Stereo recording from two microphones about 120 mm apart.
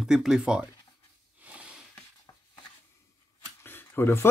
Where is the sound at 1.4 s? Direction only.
10° right (ahead or behind).